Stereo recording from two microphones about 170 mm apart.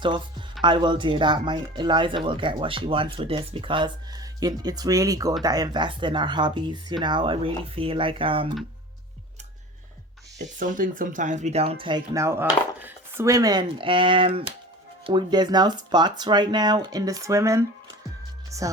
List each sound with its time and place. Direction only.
0.0 s speech: 30° right (ahead or behind)
10.3 s speech: 45° right (ahead or behind); by 18.7 s 20° right (ahead or behind)